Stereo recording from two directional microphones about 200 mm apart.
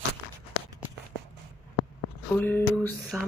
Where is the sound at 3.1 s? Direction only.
5° right (ahead or behind).